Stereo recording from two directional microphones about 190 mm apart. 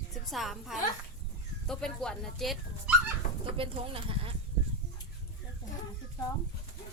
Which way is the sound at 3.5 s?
30° right (ahead or behind).